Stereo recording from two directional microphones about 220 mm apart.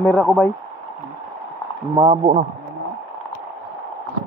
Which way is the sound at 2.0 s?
25° right (ahead or behind).